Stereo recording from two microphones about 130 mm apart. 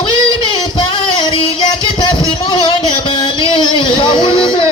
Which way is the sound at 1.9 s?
40° left (ahead or behind).